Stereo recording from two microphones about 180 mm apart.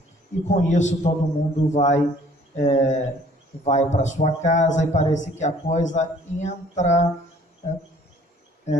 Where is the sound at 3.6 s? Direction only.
40° left (ahead or behind).